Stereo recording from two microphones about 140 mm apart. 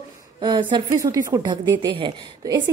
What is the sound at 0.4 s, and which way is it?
A woman's voice, 35° right (ahead or behind).